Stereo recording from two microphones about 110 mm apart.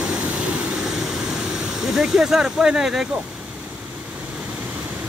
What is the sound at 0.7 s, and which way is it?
Vehicle, centre (ahead or behind).